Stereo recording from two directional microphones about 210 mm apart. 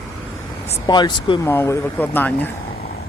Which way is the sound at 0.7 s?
20° left (ahead or behind).